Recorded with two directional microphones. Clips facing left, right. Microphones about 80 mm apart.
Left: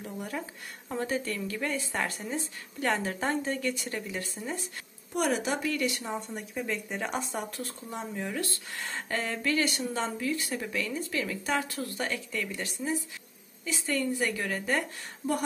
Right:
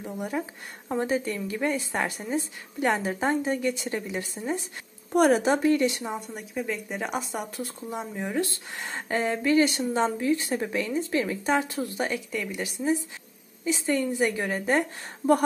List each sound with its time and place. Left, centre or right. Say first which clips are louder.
0.0 s speech: right 5 dB; centre
5.1 s speech: right 8 dB; right
6.1 s speech: right 2 dB; centre; by 14.9 s right